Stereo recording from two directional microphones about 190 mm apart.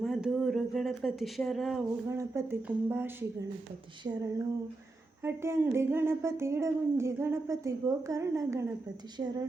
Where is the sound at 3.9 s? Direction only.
20° right (ahead or behind).